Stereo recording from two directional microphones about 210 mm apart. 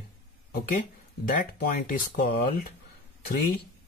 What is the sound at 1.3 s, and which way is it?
Speech, 40° left (ahead or behind).